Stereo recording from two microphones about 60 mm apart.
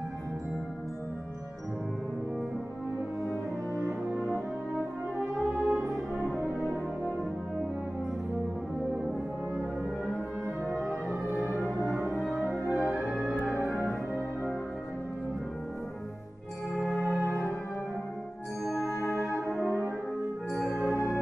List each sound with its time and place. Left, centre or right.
5.2 s french horn: right
10.7 s music: centre
16.7 s music: centre
18.7 s music: left
20.6 s music: left